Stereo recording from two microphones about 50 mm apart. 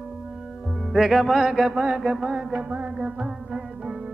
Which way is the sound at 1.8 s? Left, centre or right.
Centre.